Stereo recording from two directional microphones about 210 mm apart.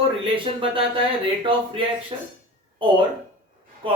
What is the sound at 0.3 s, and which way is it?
Speech, 25° right (ahead or behind).